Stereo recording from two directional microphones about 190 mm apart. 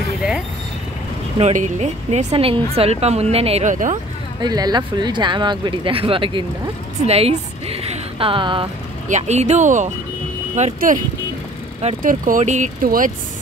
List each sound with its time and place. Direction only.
1.4 s speech: 40° right (ahead or behind)
3.9 s a woman's voice: 20° right (ahead or behind)
9.1 s speech: 35° right (ahead or behind)